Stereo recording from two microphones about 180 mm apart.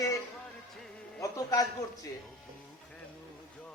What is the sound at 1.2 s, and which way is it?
Speech, 20° left (ahead or behind).